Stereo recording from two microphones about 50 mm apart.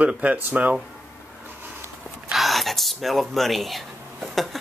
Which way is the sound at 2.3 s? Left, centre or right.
Centre.